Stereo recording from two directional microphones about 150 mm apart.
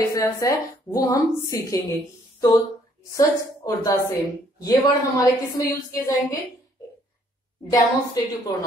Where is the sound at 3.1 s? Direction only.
20° left (ahead or behind).